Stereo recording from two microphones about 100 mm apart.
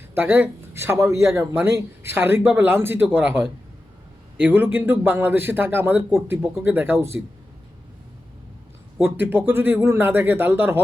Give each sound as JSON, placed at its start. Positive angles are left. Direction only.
{"t": 0.1, "sound": "a man's voice", "side_deg": -20}
{"t": 9.0, "sound": "a man's voice", "side_deg": -20}